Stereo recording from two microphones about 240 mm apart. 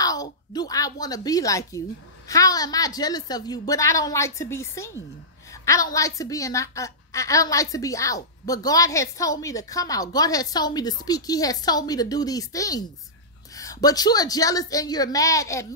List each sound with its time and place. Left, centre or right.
0.0 s a woman's voice: centre